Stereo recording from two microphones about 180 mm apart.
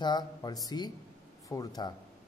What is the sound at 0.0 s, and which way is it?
Speech, 25° left (ahead or behind).